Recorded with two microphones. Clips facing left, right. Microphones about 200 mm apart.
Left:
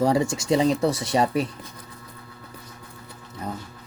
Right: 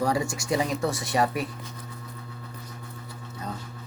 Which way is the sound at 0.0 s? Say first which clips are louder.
Left 5 dB; 25° left (ahead or behind).